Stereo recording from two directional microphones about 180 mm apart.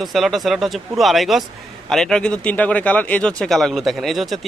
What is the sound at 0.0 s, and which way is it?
A man's voice, centre (ahead or behind).